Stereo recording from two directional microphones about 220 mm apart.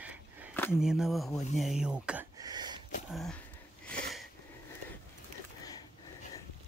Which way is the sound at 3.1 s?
Centre (ahead or behind).